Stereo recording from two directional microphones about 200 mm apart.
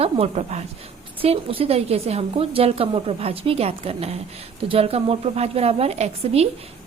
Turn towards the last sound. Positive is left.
turn(degrees=-30)  # may be behind; listen again after turning